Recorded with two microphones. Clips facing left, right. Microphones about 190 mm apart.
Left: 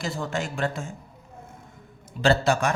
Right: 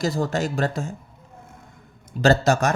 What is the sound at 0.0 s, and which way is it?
Speech, 40° right (ahead or behind).